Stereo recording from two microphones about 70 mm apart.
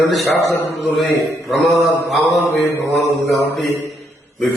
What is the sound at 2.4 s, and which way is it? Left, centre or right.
Mantra, left.